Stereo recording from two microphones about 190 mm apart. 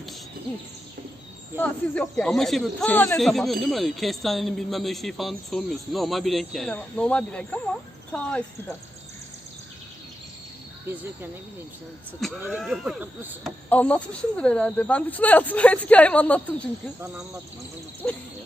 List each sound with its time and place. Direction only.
1.5 s speech: 5° left (ahead or behind)
12.4 s speech: 5° right (ahead or behind)
13.7 s speech: 5° left (ahead or behind)
18.0 s speech: 5° left (ahead or behind)